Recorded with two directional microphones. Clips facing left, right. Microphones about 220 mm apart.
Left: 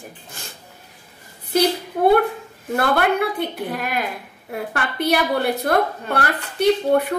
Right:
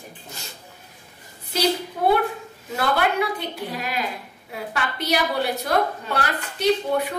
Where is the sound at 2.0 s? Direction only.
50° left (ahead or behind).